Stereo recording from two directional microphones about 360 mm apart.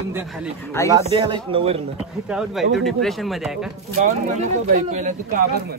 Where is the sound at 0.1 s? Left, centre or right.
Centre.